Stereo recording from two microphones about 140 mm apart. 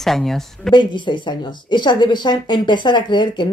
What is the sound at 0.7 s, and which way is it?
Speech, 35° left (ahead or behind).